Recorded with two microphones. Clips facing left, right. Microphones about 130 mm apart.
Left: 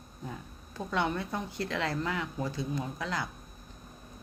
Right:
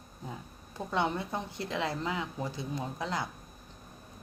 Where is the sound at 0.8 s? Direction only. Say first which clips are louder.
Even; 20° right (ahead or behind).